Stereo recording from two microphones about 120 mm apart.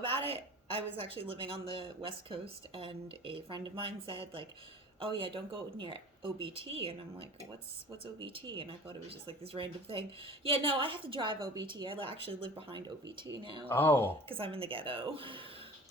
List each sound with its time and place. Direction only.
0.0 s a woman's voice: 50° right (ahead or behind)
13.7 s speech: 15° left (ahead or behind)
14.3 s a woman's voice: 50° right (ahead or behind)